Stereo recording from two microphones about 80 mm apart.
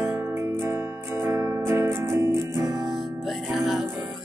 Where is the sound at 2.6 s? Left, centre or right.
Right.